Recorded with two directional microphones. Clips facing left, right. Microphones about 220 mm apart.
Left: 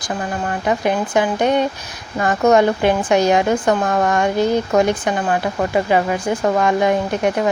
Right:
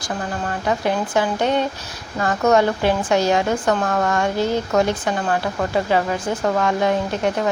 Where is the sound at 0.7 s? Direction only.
15° left (ahead or behind).